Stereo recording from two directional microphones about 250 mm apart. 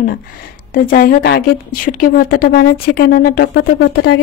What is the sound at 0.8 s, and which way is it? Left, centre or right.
Speech, left.